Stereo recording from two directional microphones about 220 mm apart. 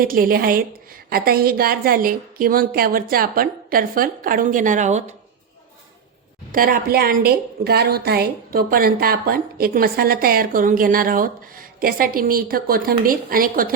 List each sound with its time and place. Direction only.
0.0 s a woman's voice: 40° right (ahead or behind)
6.5 s a woman's voice: 40° right (ahead or behind)